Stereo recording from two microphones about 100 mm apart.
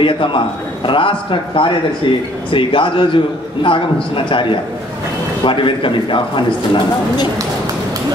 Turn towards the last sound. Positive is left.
turn(degrees=50)  # may be behind; listen again after turning